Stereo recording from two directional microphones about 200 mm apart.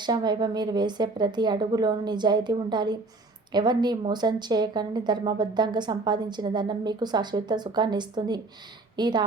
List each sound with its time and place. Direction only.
0.0 s speech: 20° right (ahead or behind)